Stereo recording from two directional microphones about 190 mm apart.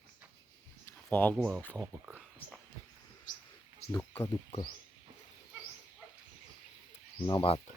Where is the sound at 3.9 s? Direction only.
10° left (ahead or behind).